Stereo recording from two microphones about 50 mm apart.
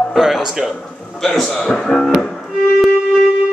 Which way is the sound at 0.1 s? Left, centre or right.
Centre.